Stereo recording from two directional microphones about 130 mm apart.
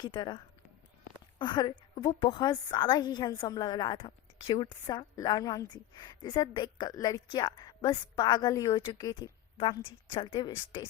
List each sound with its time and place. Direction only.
0.0 s a woman's voice: 35° left (ahead or behind)
2.0 s speech: 50° left (ahead or behind)
2.4 s a woman's voice: 30° left (ahead or behind)